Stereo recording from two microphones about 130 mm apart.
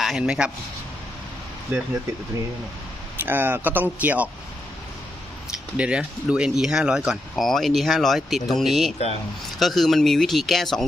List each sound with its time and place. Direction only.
0.0 s a man's voice: 5° right (ahead or behind)
1.7 s speech: 15° right (ahead or behind)
3.2 s speech: 15° right (ahead or behind)
5.7 s speech: 10° right (ahead or behind)